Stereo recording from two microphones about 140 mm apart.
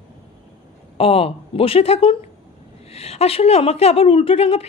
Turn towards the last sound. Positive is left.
turn(degrees=45)  # may be behind; listen again after turning